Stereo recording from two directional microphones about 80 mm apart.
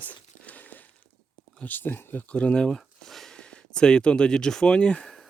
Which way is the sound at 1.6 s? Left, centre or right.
Left.